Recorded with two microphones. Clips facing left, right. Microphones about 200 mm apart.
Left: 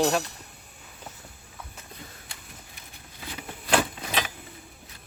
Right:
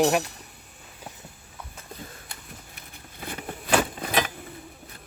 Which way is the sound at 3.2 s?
55° right (ahead or behind).